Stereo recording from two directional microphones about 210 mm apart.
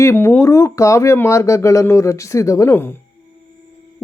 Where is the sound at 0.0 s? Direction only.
10° left (ahead or behind).